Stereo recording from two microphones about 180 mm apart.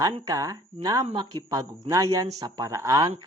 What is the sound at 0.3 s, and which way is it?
Speech, 20° right (ahead or behind).